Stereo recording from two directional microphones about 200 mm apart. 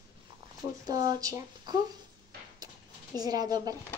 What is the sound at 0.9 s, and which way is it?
Speech, 20° right (ahead or behind).